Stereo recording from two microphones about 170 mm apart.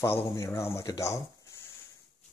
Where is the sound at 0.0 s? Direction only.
15° left (ahead or behind).